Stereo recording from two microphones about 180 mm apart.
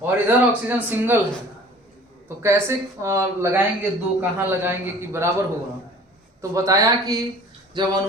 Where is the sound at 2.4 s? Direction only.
15° right (ahead or behind).